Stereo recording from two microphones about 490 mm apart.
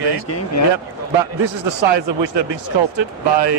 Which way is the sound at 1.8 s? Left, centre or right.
Right.